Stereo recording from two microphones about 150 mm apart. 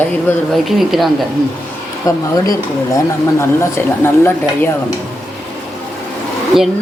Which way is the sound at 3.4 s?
15° left (ahead or behind).